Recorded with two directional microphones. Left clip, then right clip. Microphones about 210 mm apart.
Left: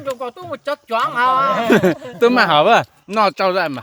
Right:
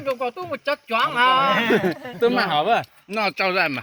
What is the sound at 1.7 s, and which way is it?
Speech, 50° left (ahead or behind).